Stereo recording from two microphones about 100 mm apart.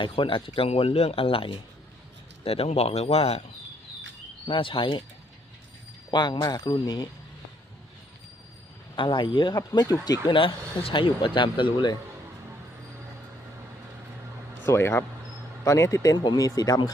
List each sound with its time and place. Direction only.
0.0 s speech: 60° left (ahead or behind)
2.4 s speech: 80° left
4.4 s speech: 60° left (ahead or behind)
6.1 s speech: 45° left (ahead or behind)
9.0 s speech: 55° left (ahead or behind)
9.6 s speech: 35° left (ahead or behind)
10.3 s speech: 60° left (ahead or behind)
14.7 s speech: 25° left (ahead or behind)
16.1 s speech: 50° left (ahead or behind)